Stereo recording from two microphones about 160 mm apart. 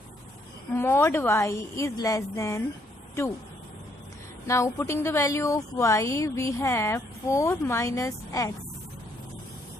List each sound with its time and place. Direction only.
0.7 s a woman's voice: 15° left (ahead or behind)
4.4 s a woman's voice: 20° left (ahead or behind)